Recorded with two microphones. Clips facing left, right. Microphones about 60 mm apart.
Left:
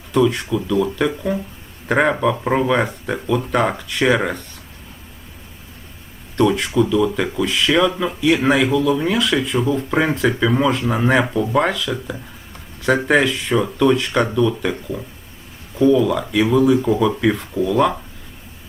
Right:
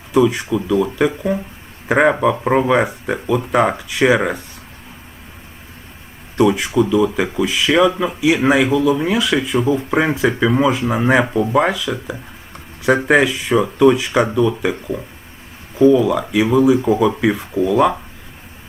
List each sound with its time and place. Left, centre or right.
0.1 s speech: centre
6.3 s speech: centre